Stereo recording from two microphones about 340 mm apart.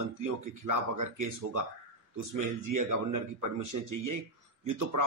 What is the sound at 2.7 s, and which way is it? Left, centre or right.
A man's voice, right.